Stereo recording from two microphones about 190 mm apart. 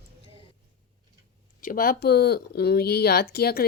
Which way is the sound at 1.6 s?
50° left (ahead or behind).